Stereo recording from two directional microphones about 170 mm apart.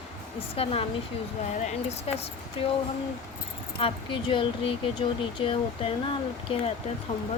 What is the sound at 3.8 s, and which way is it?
Speech, 30° left (ahead or behind).